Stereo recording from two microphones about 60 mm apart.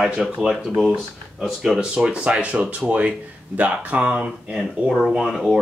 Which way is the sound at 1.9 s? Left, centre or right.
Centre.